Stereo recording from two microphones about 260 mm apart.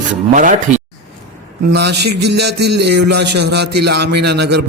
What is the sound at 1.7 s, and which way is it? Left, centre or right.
A man's voice, right.